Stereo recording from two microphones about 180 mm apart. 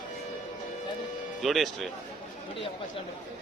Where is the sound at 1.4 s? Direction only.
Centre (ahead or behind).